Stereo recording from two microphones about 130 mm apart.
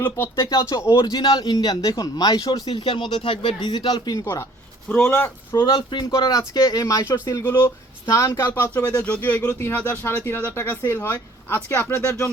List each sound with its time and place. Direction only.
0.0 s speech: 15° left (ahead or behind)
5.5 s speech: 35° left (ahead or behind); by 12.3 s 15° left (ahead or behind)